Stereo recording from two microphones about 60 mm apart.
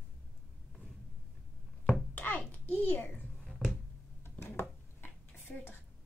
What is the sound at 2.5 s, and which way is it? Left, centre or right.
Speech, left.